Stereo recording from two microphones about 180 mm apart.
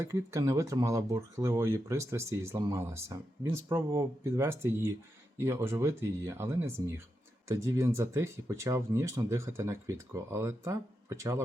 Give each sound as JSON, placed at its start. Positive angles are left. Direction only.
{"t": 0.0, "sound": "speech", "side_deg": -20}